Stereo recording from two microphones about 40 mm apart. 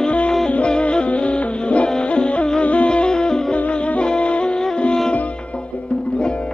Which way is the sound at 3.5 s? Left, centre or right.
Left.